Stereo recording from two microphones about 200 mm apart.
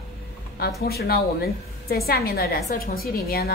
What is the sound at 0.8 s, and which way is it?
A woman's voice, 50° left (ahead or behind).